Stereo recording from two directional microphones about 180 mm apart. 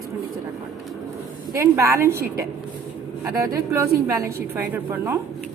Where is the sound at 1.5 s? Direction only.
15° right (ahead or behind).